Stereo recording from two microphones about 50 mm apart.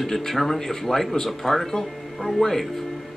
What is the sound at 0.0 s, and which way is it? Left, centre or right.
Speech, centre.